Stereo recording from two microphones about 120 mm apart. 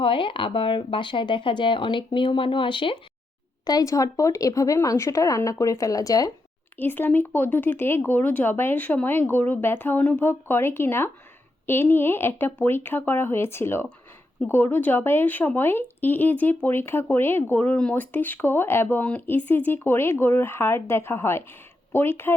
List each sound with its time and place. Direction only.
0.0 s speech: 45° left (ahead or behind)
3.7 s speech: 30° left (ahead or behind)
6.7 s speech: 15° left (ahead or behind)